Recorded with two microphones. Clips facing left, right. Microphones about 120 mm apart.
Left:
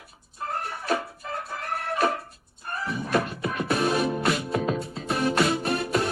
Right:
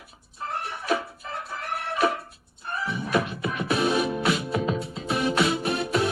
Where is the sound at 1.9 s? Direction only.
40° left (ahead or behind).